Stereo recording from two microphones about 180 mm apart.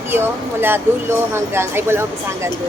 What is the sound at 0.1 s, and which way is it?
Speech, 10° right (ahead or behind).